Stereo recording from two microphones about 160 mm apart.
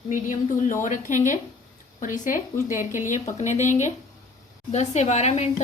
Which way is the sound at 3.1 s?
50° left (ahead or behind).